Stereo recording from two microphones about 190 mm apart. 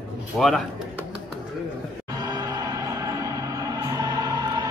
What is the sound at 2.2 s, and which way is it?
Music, 20° right (ahead or behind).